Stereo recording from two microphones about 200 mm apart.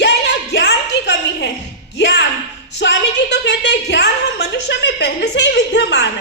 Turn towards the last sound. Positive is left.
turn(degrees=60)  # may be behind; listen again after turning